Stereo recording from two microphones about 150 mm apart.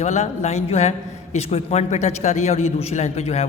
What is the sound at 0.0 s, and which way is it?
A man's voice, 50° left (ahead or behind).